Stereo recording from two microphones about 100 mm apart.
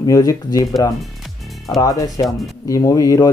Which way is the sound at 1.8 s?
40° left (ahead or behind).